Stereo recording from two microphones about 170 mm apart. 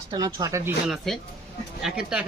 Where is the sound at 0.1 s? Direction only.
25° right (ahead or behind).